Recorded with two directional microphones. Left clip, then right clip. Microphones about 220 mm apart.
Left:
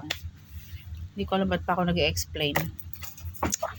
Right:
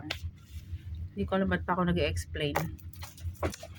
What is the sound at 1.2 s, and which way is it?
Speech, 10° right (ahead or behind).